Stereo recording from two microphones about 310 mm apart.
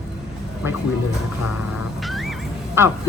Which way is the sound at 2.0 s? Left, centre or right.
Centre.